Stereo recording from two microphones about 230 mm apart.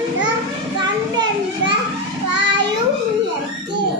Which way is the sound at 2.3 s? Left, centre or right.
Right.